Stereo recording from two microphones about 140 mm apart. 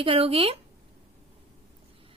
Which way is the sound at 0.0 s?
40° right (ahead or behind).